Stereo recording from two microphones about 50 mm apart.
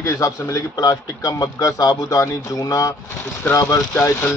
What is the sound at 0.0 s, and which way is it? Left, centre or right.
Speech, left.